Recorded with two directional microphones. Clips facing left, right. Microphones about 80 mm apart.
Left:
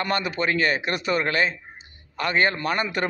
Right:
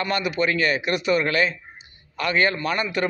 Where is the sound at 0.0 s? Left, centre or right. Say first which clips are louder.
Right 1 dB; left.